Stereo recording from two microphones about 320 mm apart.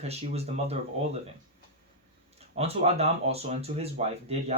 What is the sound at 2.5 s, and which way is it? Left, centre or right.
Speech, centre.